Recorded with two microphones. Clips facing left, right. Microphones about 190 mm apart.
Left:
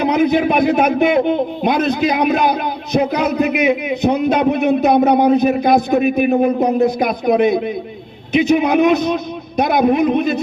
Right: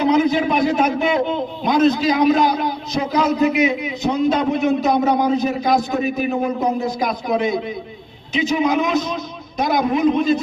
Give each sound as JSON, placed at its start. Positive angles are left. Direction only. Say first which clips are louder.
{"t": 0.0, "sound": "a man's voice", "louder": "left 2 dB", "side_deg": 60}